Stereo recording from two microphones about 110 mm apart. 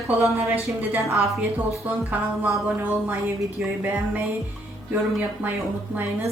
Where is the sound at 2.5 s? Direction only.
20° right (ahead or behind).